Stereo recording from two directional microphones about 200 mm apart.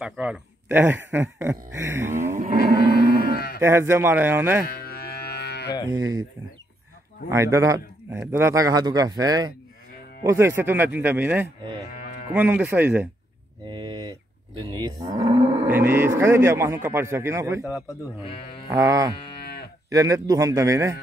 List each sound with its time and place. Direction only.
0.0 s speech: 5° right (ahead or behind)
3.3 s cattle: 50° left (ahead or behind)
3.6 s speech: 15° right (ahead or behind)
4.6 s livestock: 50° left (ahead or behind)
5.9 s speech: 15° right (ahead or behind)
7.2 s speech: 15° right (ahead or behind)
13.7 s moo: 20° right (ahead or behind)
15.3 s livestock: 30° right (ahead or behind)
15.6 s speech: 10° right (ahead or behind)
17.8 s speech: 25° left (ahead or behind)
18.7 s speech: 15° right (ahead or behind)